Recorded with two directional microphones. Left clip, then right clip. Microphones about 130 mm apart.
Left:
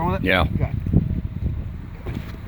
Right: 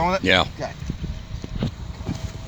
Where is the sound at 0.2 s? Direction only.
15° right (ahead or behind).